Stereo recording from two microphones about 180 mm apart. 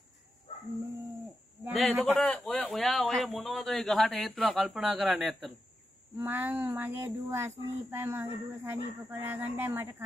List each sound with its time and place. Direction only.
1.7 s a man's voice: centre (ahead or behind); by 10.0 s 15° right (ahead or behind)